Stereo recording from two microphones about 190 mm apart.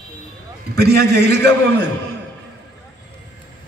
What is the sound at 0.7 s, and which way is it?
Speech, 60° right (ahead or behind).